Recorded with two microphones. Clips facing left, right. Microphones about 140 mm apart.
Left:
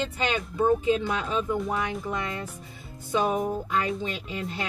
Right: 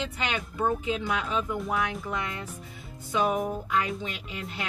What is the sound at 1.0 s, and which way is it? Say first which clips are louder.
Speech: left 2 dB; 30° left (ahead or behind).